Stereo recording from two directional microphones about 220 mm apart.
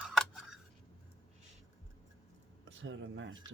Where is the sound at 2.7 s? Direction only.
60° right (ahead or behind).